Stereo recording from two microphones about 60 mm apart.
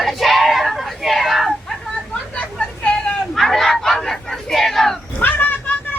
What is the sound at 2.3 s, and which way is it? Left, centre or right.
Vehicle, left.